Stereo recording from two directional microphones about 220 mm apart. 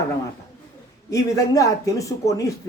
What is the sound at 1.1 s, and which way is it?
A man's voice, 15° left (ahead or behind).